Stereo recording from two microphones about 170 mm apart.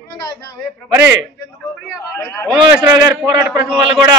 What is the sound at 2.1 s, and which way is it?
Speech, 15° left (ahead or behind).